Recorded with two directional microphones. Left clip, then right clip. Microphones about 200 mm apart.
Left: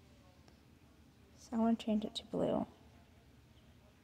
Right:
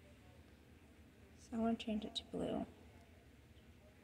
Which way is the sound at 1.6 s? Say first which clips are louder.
Left 5 dB; 40° left (ahead or behind).